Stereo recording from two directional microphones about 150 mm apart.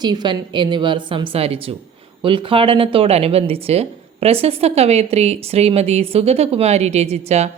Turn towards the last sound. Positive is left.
turn(degrees=-45)  # may be behind; listen again after turning